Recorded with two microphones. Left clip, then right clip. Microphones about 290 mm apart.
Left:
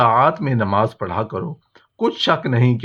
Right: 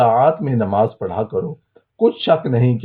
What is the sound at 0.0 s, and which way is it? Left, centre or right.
Speech, left.